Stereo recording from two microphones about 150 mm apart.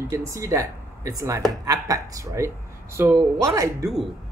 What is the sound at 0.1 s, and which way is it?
Speech, 20° right (ahead or behind).